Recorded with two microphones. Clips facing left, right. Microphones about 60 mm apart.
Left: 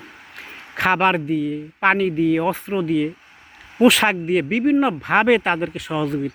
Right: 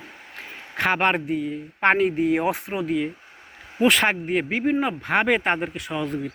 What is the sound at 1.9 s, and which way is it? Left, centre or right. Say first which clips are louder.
Speech: left 2 dB; right.